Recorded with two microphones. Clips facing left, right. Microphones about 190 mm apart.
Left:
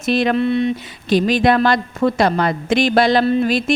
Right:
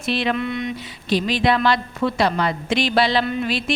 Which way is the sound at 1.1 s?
45° left (ahead or behind).